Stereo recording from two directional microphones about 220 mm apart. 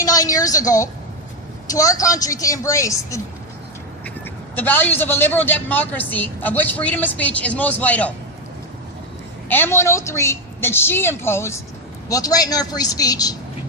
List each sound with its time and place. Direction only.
0.0 s a woman's voice: 15° left (ahead or behind)
4.5 s a woman's voice: 10° left (ahead or behind)
9.5 s a woman's voice: 10° left (ahead or behind)